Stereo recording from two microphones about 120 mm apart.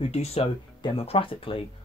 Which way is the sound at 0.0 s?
60° left (ahead or behind).